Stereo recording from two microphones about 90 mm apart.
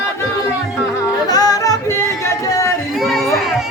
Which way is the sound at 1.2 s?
45° left (ahead or behind).